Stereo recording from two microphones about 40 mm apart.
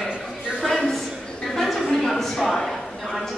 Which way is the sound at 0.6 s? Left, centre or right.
Centre.